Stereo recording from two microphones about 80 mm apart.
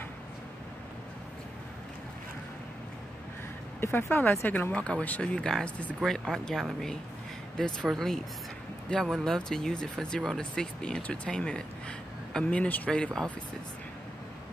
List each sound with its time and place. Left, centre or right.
3.8 s speech: left
4.7 s speech: centre